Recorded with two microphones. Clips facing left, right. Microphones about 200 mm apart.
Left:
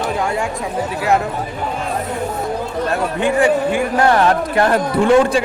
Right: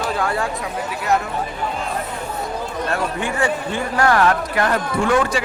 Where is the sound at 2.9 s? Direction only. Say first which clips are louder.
Left 7 dB; 20° left (ahead or behind).